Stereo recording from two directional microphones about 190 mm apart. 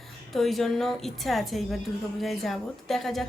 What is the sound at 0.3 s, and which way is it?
A woman's voice, centre (ahead or behind).